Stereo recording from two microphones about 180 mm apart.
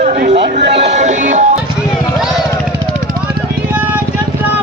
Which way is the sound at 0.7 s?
35° right (ahead or behind).